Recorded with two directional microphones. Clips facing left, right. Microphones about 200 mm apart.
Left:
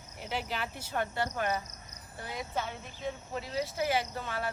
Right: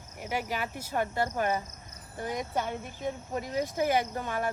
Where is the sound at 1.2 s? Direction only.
45° right (ahead or behind).